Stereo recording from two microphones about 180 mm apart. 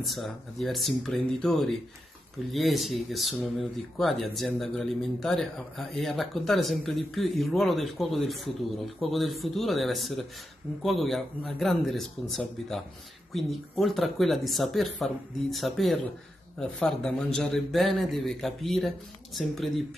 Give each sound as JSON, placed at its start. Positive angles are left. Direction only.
{"t": 0.0, "sound": "speech", "side_deg": 0}